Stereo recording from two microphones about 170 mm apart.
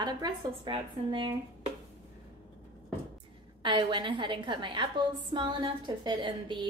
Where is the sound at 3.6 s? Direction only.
25° right (ahead or behind).